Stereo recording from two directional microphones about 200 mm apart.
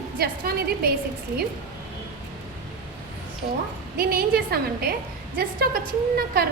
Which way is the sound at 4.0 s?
50° right (ahead or behind).